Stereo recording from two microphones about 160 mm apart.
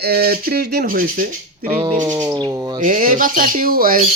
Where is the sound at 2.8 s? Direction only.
55° right (ahead or behind).